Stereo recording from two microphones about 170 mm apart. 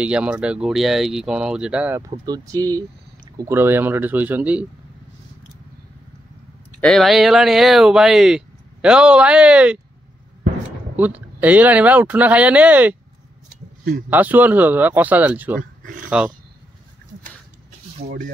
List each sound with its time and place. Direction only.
0.0 s speech: 5° right (ahead or behind)
2.0 s speech: 20° right (ahead or behind)
6.8 s speech: centre (ahead or behind)
11.0 s speech: 10° right (ahead or behind)
14.1 s speech: 10° right (ahead or behind)
15.8 s a sound: 50° right (ahead or behind)
18.0 s speech: 65° right (ahead or behind)